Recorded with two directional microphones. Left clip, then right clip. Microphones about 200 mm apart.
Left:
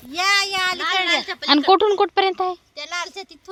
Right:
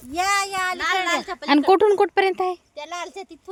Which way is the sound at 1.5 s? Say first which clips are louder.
Left 1 dB; 25° right (ahead or behind).